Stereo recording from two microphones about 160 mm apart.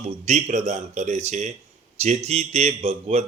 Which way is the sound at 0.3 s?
45° right (ahead or behind).